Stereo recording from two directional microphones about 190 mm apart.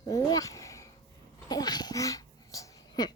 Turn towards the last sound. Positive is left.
turn(degrees=20)  # may be behind; listen again after turning